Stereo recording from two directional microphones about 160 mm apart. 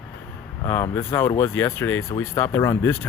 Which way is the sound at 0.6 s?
15° left (ahead or behind).